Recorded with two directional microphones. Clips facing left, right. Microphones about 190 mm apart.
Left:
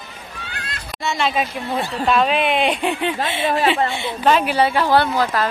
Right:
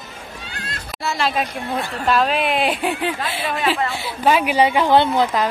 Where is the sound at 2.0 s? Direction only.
Centre (ahead or behind); by 5.5 s 20° right (ahead or behind).